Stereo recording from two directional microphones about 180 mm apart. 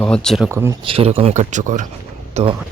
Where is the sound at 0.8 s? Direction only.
30° right (ahead or behind).